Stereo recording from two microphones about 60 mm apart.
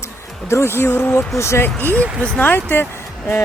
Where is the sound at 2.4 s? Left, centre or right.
Left.